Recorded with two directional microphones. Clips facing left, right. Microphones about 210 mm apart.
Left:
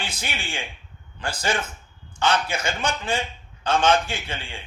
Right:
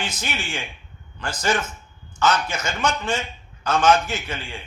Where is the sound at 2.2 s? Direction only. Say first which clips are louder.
Right 1 dB; 30° left (ahead or behind).